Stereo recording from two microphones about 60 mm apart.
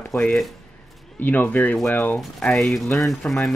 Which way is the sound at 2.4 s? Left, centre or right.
Centre.